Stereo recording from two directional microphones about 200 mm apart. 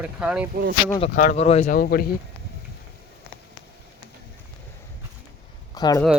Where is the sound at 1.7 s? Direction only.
45° left (ahead or behind).